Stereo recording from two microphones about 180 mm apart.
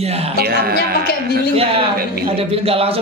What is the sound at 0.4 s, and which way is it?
Speech, 60° right (ahead or behind).